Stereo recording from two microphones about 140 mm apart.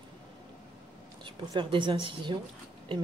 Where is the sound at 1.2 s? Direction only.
35° right (ahead or behind).